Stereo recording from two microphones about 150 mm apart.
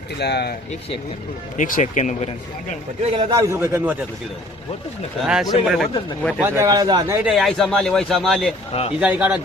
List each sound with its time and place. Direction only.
0.2 s speech: 90° left
1.5 s speech: 60° left (ahead or behind)
3.0 s a man's voice: 40° right (ahead or behind)
3.3 s a man's voice: 20° right (ahead or behind)
5.2 s a man's voice: 5° right (ahead or behind)
6.4 s speech: 20° right (ahead or behind)
7.3 s a man's voice: centre (ahead or behind)